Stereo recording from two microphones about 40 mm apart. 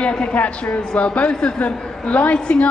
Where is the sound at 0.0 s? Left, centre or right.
Left.